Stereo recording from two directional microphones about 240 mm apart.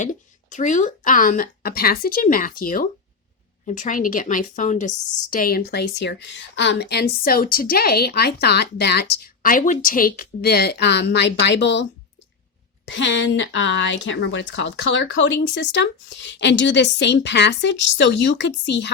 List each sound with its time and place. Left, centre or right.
0.0 s a woman's voice: left